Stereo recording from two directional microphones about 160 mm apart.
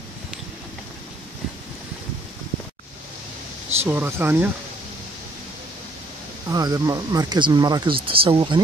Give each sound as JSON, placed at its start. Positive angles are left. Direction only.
{"t": 3.8, "sound": "speech", "side_deg": -15}
{"t": 6.5, "sound": "speech", "side_deg": -20}